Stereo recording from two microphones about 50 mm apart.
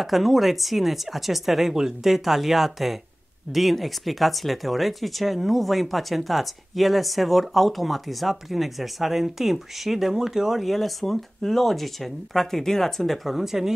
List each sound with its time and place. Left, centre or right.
0.0 s speech: centre